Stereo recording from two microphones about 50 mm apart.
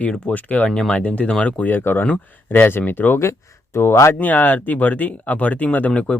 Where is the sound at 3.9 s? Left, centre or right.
Left.